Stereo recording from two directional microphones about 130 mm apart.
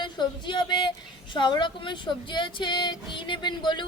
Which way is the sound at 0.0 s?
35° left (ahead or behind).